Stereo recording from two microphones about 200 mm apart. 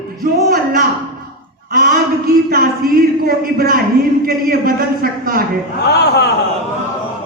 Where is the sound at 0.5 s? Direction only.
50° right (ahead or behind).